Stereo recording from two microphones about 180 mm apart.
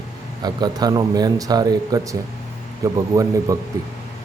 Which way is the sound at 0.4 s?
20° right (ahead or behind).